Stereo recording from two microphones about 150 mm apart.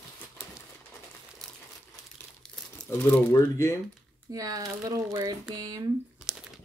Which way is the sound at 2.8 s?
15° left (ahead or behind).